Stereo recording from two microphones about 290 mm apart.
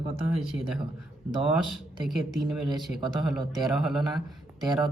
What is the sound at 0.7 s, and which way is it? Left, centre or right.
Speech, centre.